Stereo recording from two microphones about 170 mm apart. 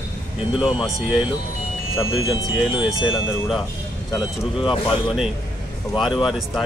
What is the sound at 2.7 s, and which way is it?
Speech, 30° left (ahead or behind).